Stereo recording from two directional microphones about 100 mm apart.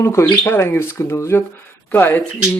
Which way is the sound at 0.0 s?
25° left (ahead or behind).